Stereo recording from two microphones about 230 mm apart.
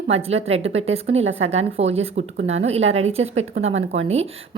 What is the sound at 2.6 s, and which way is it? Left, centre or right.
Speech, right.